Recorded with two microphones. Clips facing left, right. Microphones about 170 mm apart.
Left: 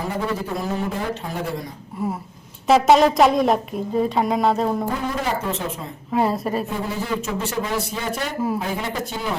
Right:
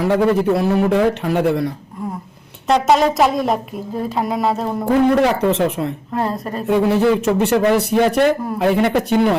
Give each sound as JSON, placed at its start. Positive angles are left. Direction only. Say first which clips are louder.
{"t": 0.0, "sound": "speech", "louder": "right 10 dB", "side_deg": -75}
{"t": 2.6, "sound": "speech", "louder": "even", "side_deg": 0}
{"t": 4.9, "sound": "speech", "louder": "right 11 dB", "side_deg": -65}
{"t": 6.1, "sound": "speech", "louder": "left 2 dB", "side_deg": 5}
{"t": 6.7, "sound": "speech", "louder": "right 11 dB", "side_deg": -75}
{"t": 8.5, "sound": "speech", "louder": "right 10 dB", "side_deg": -75}